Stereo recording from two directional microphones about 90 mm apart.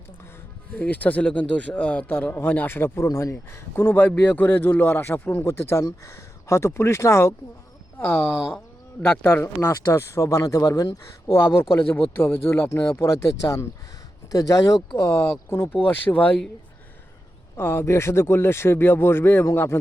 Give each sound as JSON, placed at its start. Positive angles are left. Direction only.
{"t": 0.7, "sound": "speech", "side_deg": 20}
{"t": 14.9, "sound": "speech", "side_deg": 30}
{"t": 17.6, "sound": "speech", "side_deg": 25}